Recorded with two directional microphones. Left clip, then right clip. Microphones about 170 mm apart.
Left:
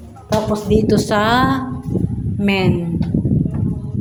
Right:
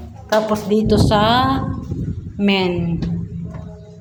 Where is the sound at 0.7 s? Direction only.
35° left (ahead or behind).